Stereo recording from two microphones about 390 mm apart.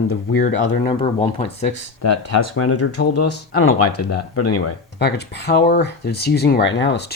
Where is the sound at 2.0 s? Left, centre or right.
Left.